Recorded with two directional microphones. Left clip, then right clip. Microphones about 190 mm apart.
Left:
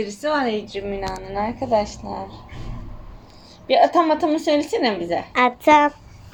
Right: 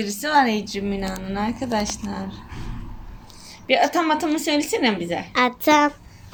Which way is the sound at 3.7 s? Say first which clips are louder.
Left 3 dB; 45° right (ahead or behind).